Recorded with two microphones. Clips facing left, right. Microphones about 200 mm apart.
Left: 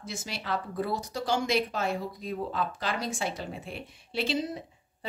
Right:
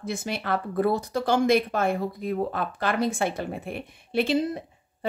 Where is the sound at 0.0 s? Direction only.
55° right (ahead or behind).